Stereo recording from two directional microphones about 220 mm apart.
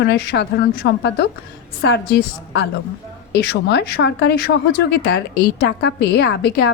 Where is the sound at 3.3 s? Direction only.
50° left (ahead or behind).